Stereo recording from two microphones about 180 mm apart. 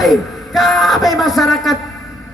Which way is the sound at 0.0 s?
Centre (ahead or behind).